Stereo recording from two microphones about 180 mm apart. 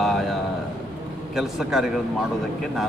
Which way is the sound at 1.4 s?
Centre (ahead or behind).